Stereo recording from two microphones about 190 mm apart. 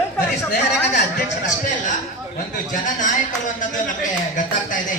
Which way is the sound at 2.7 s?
40° left (ahead or behind).